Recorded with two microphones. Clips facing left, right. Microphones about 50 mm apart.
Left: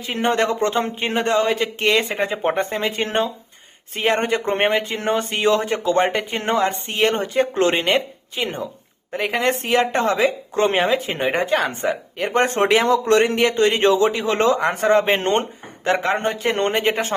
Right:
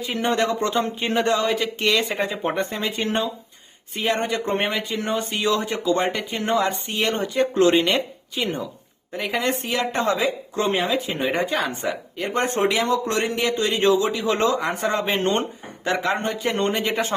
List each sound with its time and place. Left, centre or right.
0.0 s speech: left
9.1 s speech: left
12.3 s speech: left